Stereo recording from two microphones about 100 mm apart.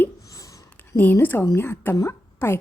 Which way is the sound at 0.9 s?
20° left (ahead or behind).